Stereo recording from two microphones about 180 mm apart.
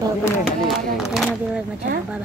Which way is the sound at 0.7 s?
Centre (ahead or behind).